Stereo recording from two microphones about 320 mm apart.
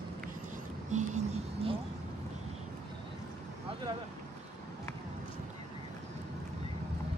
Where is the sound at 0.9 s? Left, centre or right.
Right.